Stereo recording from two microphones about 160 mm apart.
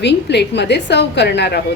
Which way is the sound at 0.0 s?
90° left.